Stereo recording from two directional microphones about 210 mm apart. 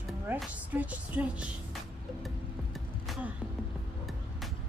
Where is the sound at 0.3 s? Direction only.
5° right (ahead or behind).